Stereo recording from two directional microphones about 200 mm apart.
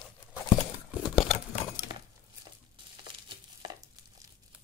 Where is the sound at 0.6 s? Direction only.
30° left (ahead or behind).